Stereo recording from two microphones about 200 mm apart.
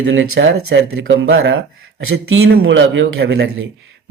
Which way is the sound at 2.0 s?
90° right.